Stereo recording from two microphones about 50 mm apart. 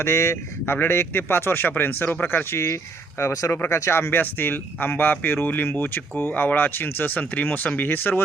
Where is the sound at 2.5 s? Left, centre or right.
Left.